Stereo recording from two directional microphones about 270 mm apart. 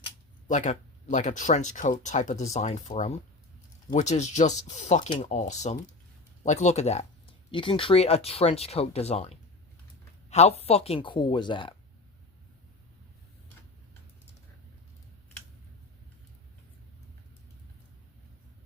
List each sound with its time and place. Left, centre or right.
0.0 s speech: left